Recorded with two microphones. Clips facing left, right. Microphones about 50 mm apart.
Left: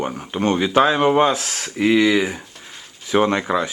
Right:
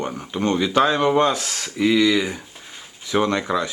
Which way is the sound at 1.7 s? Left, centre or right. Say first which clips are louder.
Left 2 dB; left.